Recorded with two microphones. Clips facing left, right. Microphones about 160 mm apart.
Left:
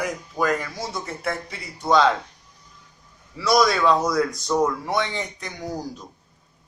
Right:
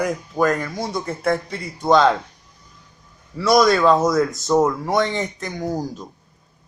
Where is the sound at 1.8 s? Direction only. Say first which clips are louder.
Right 3 dB; 45° right (ahead or behind).